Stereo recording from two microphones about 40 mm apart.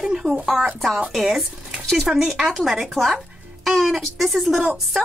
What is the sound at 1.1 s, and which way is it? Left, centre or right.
A woman's voice, centre.